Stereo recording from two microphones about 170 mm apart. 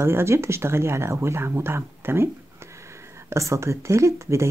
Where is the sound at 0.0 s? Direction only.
15° right (ahead or behind).